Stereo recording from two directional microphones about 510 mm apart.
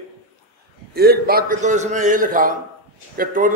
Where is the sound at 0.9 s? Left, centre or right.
Centre.